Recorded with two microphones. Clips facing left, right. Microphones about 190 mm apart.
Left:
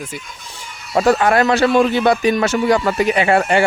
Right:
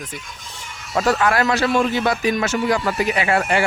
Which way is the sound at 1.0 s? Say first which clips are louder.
Left 4 dB; 25° left (ahead or behind).